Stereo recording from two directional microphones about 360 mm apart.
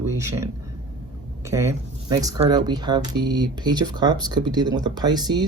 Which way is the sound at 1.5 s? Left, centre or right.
Centre.